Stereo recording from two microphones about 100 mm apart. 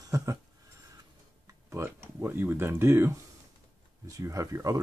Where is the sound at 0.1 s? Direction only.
35° right (ahead or behind).